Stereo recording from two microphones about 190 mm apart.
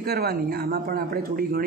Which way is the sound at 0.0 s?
55° right (ahead or behind).